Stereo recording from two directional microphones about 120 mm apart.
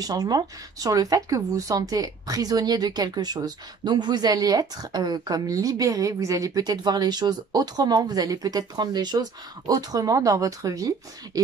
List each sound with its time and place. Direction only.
0.0 s speech: 30° right (ahead or behind)